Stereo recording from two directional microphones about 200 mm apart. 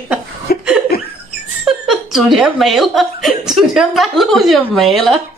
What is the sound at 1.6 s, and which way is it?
Speech, centre (ahead or behind).